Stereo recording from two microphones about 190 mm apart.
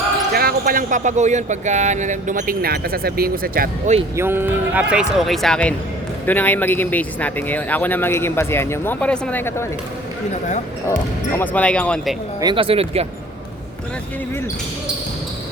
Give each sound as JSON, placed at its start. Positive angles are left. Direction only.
{"t": 0.3, "sound": "speech", "side_deg": -50}
{"t": 4.2, "sound": "speech", "side_deg": -10}
{"t": 11.3, "sound": "speech", "side_deg": 5}
{"t": 12.4, "sound": "speech", "side_deg": -25}